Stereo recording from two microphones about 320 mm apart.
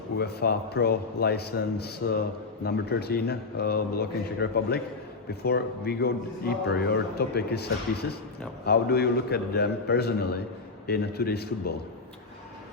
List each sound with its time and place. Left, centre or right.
0.2 s a man's voice: left